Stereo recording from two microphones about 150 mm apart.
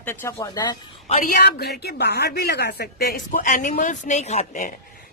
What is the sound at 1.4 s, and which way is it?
Speech, 90° left.